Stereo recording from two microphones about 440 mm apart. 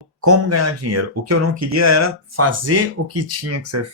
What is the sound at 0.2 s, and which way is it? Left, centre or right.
Speech, right.